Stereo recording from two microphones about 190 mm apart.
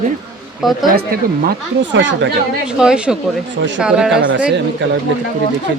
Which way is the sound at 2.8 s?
5° right (ahead or behind).